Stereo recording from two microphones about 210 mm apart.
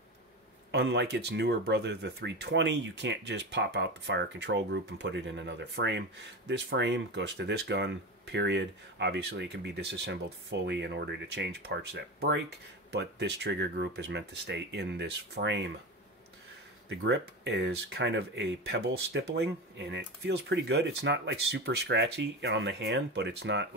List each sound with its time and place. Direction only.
0.7 s speech: 55° right (ahead or behind)
17.0 s speech: 55° right (ahead or behind)